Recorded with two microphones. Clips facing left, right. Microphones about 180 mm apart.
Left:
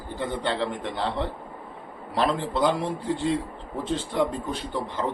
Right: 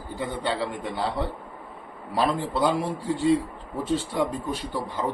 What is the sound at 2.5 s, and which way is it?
Speech, 5° right (ahead or behind).